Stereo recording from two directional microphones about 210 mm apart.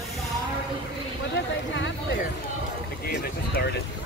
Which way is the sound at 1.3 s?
60° left (ahead or behind).